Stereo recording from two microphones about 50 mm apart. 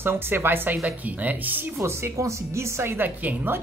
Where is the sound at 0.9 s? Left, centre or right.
Right.